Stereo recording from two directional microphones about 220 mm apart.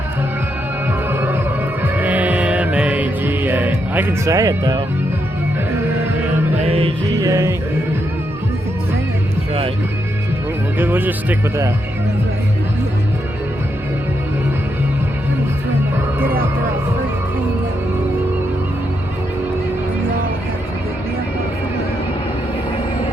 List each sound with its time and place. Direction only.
1.1 s music: 10° right (ahead or behind)
6.6 s music: 25° right (ahead or behind)
7.2 s speech: 15° right (ahead or behind)
10.8 s speech: 10° right (ahead or behind)